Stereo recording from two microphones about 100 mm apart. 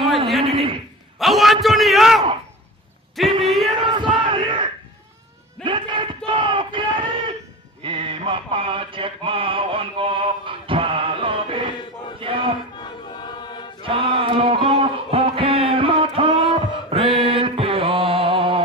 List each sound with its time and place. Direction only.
0.4 s a man's voice: 70° right (ahead or behind)
1.2 s a man's voice: centre (ahead or behind)
3.8 s battle cry: 55° right (ahead or behind)
5.6 s a sound: 55° right (ahead or behind)
12.8 s choir: 45° left (ahead or behind)
13.8 s a sound: 60° right (ahead or behind)